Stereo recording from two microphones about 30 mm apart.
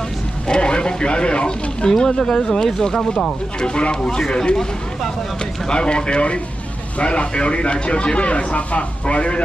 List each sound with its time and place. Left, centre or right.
0.5 s speech: left
1.9 s speech: centre
5.7 s speech: left